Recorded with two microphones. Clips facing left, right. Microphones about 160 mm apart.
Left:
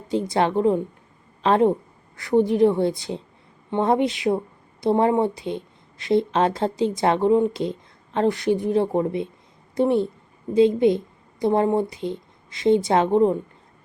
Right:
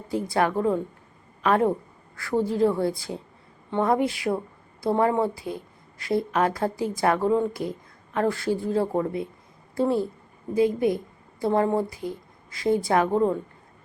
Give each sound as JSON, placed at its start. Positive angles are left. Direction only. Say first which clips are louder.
{"t": 0.1, "sound": "a woman's voice", "louder": "left 3 dB", "side_deg": 20}